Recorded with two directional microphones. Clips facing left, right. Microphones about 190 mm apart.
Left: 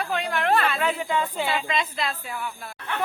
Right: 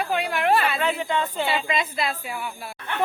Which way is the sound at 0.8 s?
5° left (ahead or behind).